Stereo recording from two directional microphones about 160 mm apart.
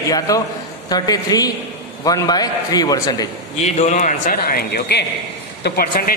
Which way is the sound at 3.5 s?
45° left (ahead or behind).